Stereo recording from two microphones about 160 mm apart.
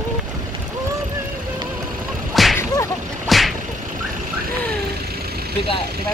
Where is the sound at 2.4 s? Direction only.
Centre (ahead or behind).